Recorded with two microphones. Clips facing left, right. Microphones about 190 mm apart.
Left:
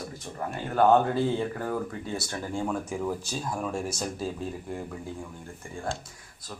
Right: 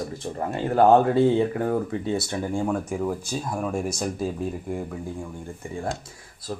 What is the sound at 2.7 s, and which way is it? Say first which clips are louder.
Speech: right 4 dB; 10° right (ahead or behind).